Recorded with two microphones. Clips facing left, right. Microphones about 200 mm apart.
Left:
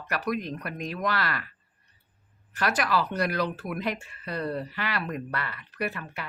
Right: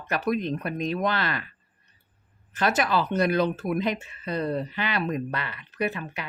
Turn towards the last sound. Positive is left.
turn(degrees=-20)  # may be behind; listen again after turning